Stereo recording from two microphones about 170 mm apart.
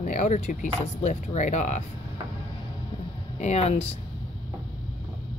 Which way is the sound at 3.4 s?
40° left (ahead or behind).